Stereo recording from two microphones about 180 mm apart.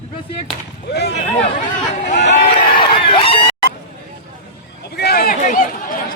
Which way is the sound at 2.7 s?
25° left (ahead or behind).